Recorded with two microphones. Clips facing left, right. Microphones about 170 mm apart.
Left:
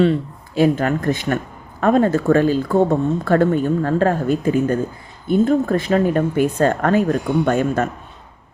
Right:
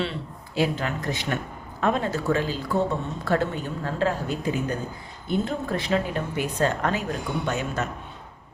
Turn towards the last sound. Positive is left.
turn(degrees=55)  # may be behind; listen again after turning